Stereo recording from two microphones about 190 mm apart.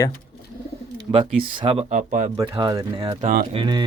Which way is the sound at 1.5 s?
25° right (ahead or behind).